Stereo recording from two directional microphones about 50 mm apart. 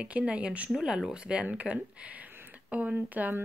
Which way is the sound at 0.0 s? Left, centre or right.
Right.